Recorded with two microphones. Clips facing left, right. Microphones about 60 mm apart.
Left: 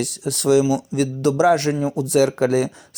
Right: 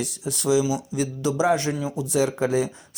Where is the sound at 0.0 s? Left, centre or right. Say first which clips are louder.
Left 5 dB; left.